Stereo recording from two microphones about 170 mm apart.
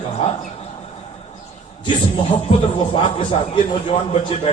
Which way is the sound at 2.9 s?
30° left (ahead or behind).